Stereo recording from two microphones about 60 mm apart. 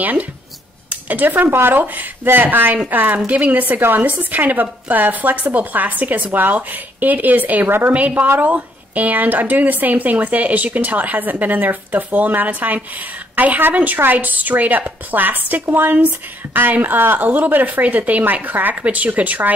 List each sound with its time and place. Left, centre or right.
0.0 s a woman's voice: right
7.9 s a woman's voice: right